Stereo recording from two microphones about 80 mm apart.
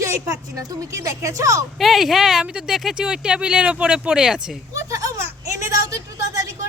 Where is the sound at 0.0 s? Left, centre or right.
Right.